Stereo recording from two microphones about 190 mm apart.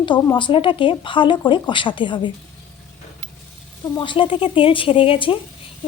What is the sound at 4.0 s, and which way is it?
Speech, 25° left (ahead or behind).